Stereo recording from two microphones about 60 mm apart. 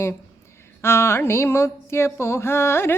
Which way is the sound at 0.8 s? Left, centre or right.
Left.